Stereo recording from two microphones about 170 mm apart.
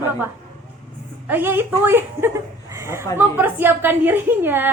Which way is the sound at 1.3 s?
10° right (ahead or behind).